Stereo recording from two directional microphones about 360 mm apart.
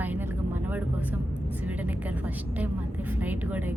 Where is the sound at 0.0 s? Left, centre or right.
Centre.